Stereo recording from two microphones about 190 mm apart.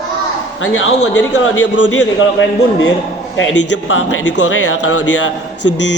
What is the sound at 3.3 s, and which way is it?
A man's voice, 90° left.